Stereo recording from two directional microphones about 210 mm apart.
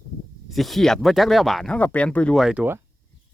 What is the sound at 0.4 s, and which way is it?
A man's voice, centre (ahead or behind).